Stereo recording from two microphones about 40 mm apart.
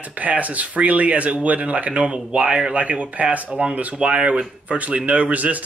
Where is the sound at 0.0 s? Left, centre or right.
Right.